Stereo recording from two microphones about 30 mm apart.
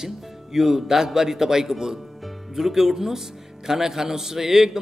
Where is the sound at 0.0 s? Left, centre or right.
Centre.